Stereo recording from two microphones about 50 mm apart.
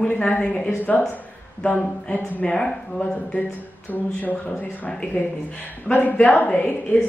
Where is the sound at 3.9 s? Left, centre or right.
Left.